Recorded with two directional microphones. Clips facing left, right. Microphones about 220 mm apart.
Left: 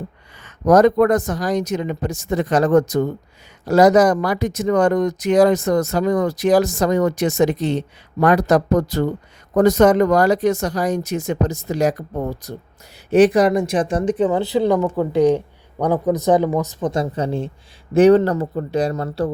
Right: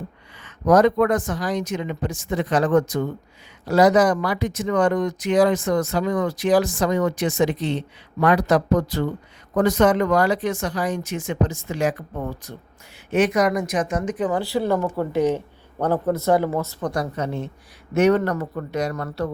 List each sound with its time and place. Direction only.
0.4 s speech: 45° left (ahead or behind)